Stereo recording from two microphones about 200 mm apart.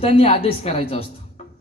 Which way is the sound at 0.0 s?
30° left (ahead or behind).